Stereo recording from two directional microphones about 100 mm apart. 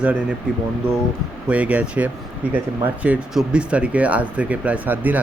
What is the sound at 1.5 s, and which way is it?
Speech, 10° right (ahead or behind).